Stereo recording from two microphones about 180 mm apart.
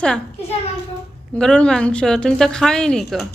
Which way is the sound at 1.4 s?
5° left (ahead or behind).